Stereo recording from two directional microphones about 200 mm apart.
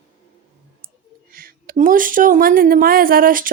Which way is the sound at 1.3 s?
45° right (ahead or behind).